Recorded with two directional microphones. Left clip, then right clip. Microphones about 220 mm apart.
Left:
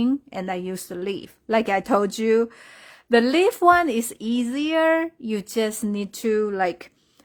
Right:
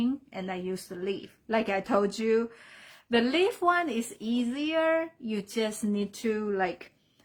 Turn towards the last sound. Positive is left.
turn(degrees=55)  # may be behind; listen again after turning